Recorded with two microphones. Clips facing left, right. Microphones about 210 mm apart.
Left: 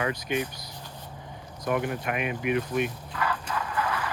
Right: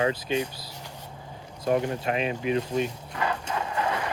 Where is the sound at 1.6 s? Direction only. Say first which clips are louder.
Right 3 dB; 25° right (ahead or behind).